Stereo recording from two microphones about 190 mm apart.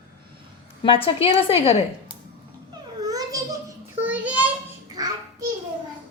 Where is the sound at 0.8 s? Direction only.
30° left (ahead or behind).